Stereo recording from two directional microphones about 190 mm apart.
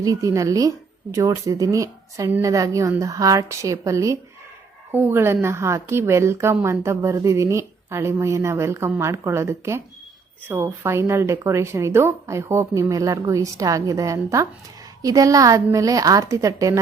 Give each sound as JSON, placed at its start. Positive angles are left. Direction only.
{"t": 0.0, "sound": "a woman's voice", "side_deg": -15}